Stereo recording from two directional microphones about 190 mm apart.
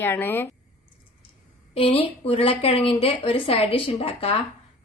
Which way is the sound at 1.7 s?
30° left (ahead or behind).